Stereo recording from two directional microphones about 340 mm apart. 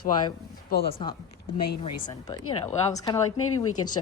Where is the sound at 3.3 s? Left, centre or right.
Left.